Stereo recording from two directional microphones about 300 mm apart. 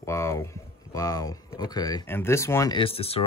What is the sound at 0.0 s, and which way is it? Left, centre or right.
A man's voice, centre.